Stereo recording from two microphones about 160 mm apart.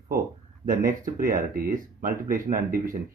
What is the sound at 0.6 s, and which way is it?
Speech, 60° right (ahead or behind).